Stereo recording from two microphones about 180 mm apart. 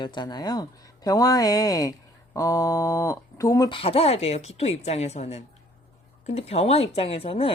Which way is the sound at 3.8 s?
30° left (ahead or behind).